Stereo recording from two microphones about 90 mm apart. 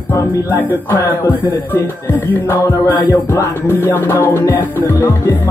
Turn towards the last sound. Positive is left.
turn(degrees=25)  # may be behind; listen again after turning